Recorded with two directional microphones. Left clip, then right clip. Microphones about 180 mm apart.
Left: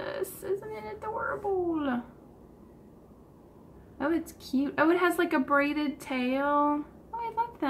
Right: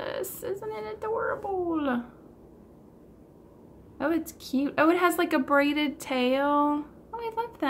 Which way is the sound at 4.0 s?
25° right (ahead or behind).